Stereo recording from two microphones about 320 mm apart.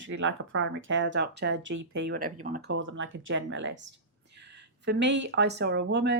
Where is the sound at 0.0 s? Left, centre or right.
Right.